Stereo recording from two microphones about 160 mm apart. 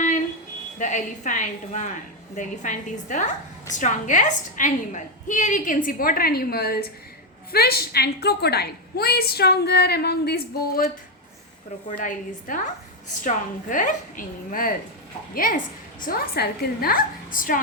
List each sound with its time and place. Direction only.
0.8 s a woman's voice: 50° left (ahead or behind); by 10.8 s 75° left (ahead or behind)
11.9 s a woman's voice: 55° left (ahead or behind)